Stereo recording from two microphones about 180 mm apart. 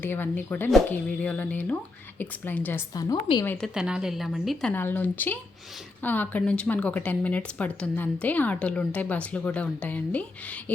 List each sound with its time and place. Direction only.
0.0 s speech: 10° left (ahead or behind)
2.9 s a woman's voice: 20° left (ahead or behind)
3.4 s speech: 10° left (ahead or behind)
3.8 s a woman's voice: 5° right (ahead or behind)
4.7 s speech: 10° left (ahead or behind)